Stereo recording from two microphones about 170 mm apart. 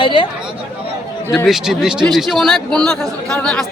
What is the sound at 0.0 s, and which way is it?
Speech, 30° left (ahead or behind).